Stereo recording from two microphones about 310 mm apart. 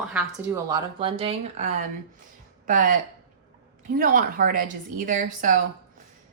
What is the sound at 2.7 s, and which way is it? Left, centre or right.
A woman's voice, right.